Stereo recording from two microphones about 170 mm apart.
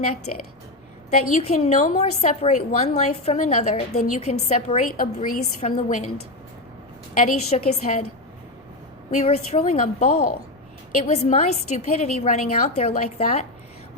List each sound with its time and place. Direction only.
1.1 s a woman's voice: 45° left (ahead or behind)
7.2 s a woman's voice: 40° left (ahead or behind)
9.1 s a woman's voice: 40° left (ahead or behind)